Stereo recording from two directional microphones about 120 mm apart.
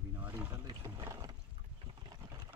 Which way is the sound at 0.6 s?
30° right (ahead or behind).